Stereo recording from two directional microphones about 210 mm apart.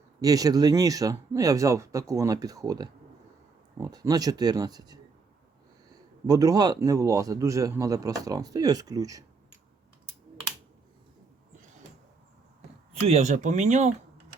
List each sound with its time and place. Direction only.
0.2 s a man's voice: 15° right (ahead or behind)
6.2 s a man's voice: 15° right (ahead or behind)
12.9 s speech: 30° right (ahead or behind)